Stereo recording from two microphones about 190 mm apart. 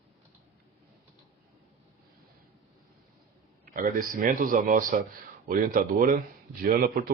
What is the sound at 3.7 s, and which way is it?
A man's voice, 45° right (ahead or behind).